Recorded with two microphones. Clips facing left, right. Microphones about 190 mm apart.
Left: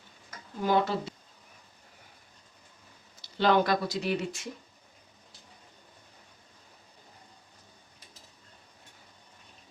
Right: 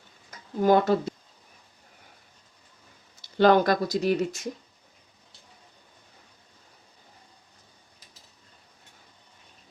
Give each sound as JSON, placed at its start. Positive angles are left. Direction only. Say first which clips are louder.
{"t": 0.6, "sound": "speech", "louder": "right 6 dB", "side_deg": -45}
{"t": 3.3, "sound": "speech", "louder": "right 5 dB", "side_deg": -45}